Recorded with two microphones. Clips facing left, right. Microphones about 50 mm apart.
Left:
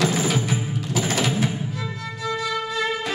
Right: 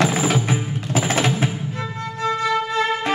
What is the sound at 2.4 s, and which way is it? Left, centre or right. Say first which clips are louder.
Music: right 5 dB; right.